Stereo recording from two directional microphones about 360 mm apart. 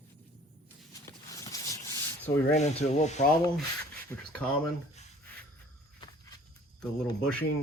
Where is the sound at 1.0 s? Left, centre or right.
Centre.